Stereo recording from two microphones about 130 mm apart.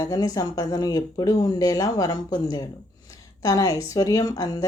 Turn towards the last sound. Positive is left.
turn(degrees=30)  # may be behind; listen again after turning